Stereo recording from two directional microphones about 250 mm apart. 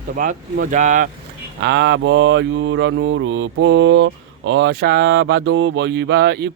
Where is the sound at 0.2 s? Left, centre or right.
Right.